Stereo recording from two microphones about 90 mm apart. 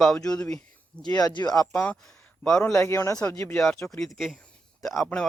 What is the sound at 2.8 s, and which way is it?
Speech, 30° left (ahead or behind).